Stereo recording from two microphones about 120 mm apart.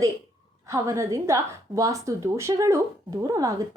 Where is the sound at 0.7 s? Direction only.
25° right (ahead or behind).